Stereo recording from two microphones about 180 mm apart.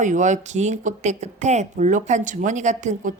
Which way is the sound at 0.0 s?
45° right (ahead or behind).